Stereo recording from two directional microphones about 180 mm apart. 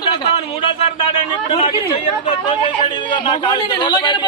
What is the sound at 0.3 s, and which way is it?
Speech, 30° left (ahead or behind).